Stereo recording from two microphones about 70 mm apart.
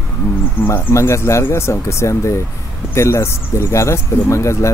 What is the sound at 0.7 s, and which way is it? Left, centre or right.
Speech, left.